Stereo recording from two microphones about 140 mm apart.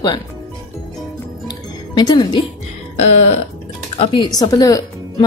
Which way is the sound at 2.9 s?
55° left (ahead or behind).